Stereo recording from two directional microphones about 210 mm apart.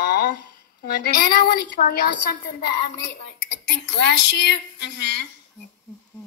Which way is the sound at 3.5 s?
60° left (ahead or behind).